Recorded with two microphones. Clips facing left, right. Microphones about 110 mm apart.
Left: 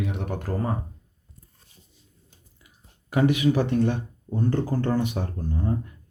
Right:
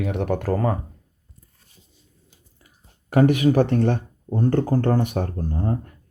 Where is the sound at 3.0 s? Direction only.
50° right (ahead or behind).